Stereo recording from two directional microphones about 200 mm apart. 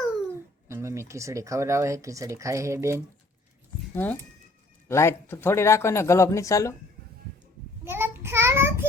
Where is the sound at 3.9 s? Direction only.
10° left (ahead or behind).